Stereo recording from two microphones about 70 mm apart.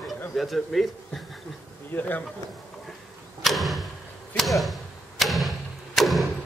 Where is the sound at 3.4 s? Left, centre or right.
Centre.